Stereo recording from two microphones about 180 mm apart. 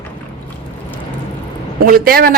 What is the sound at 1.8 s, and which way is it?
Speech, 55° right (ahead or behind).